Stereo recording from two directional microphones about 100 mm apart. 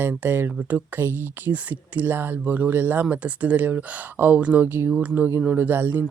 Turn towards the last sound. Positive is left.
turn(degrees=-20)  # may be behind; listen again after turning